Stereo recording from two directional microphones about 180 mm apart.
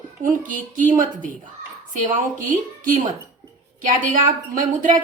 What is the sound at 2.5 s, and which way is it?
A woman's voice, 45° right (ahead or behind).